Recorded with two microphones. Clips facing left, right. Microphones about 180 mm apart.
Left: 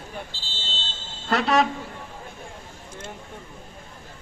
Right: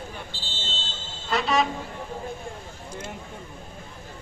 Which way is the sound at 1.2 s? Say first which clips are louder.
Left 3 dB; 65° left (ahead or behind).